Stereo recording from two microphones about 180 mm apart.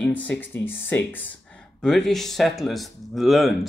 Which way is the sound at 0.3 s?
10° left (ahead or behind).